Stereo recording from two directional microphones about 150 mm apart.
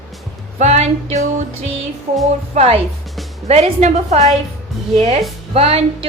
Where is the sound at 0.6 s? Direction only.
45° right (ahead or behind).